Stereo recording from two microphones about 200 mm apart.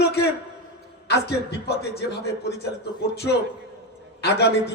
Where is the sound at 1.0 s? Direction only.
55° left (ahead or behind).